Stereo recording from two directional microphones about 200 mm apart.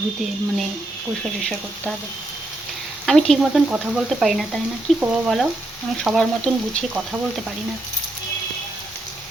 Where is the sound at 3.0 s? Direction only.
Centre (ahead or behind).